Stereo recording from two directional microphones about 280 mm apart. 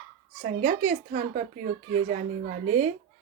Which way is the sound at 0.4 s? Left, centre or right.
Right.